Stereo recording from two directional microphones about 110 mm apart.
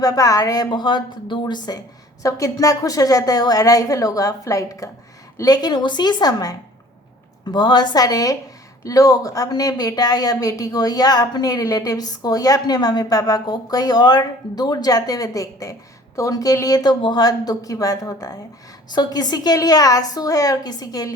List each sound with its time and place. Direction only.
0.0 s a woman's voice: 35° left (ahead or behind)
2.2 s a woman's voice: 30° left (ahead or behind)